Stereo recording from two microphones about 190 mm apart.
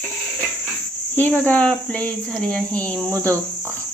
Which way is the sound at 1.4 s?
5° left (ahead or behind).